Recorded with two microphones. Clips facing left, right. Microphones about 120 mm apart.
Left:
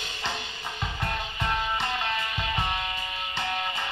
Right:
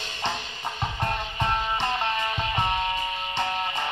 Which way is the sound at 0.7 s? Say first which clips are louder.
Right 3 dB; 40° right (ahead or behind).